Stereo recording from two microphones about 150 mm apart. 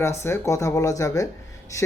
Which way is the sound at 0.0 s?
15° left (ahead or behind).